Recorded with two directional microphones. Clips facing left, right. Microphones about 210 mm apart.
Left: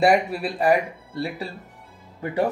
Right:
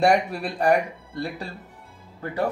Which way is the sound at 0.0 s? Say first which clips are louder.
Left 1 dB; 5° left (ahead or behind).